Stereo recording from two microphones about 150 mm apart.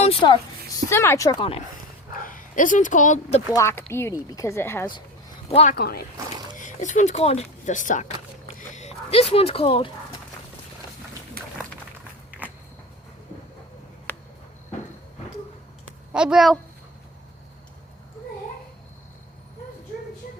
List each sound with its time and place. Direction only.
0.0 s a sound: 40° left (ahead or behind)
0.9 s speech: 15° left (ahead or behind)
1.4 s speech: 40° left (ahead or behind)
2.2 s speech: 65° left (ahead or behind)
3.5 s speech: 20° left (ahead or behind)
5.5 s speech: 40° left (ahead or behind)
5.7 s speech: 90° left
6.6 s speech: 55° left (ahead or behind)
8.5 s a sound: 50° left (ahead or behind)
11.4 s a sound: 90° right
14.1 s a sound: 10° left (ahead or behind)
16.1 s a child's voice: 5° right (ahead or behind)